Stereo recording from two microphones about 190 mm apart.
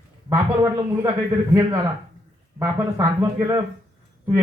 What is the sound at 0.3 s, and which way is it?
A man's voice, 15° right (ahead or behind).